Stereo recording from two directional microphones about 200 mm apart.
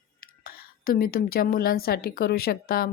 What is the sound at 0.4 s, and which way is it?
A woman's voice, 45° left (ahead or behind).